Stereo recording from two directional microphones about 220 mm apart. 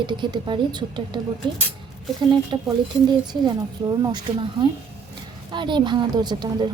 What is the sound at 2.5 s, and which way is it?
A woman's voice, 25° right (ahead or behind).